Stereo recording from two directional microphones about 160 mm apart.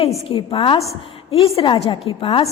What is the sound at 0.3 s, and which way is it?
A woman's voice, 35° left (ahead or behind).